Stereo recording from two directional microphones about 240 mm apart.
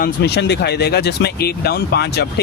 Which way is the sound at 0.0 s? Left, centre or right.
Left.